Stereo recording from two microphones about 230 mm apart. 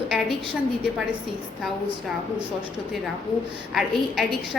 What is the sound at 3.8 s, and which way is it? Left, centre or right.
Speech, centre.